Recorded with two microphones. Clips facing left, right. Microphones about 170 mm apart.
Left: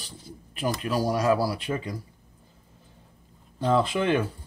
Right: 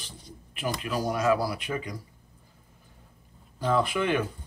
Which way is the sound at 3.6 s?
30° left (ahead or behind).